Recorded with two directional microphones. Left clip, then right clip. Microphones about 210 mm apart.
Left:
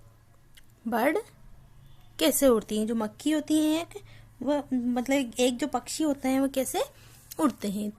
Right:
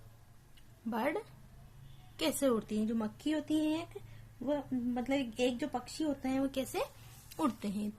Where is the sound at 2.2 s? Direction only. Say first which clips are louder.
Left 10 dB; 40° left (ahead or behind).